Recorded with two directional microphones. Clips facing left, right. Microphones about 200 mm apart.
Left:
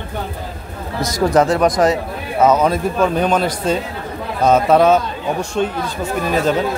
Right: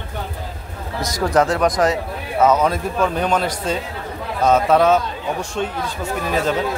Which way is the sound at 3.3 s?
5° left (ahead or behind).